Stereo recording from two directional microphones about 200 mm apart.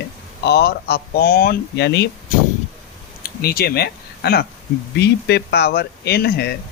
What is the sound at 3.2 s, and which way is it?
Speech, 50° left (ahead or behind).